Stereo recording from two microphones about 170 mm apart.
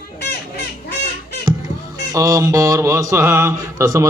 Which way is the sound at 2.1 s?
20° right (ahead or behind).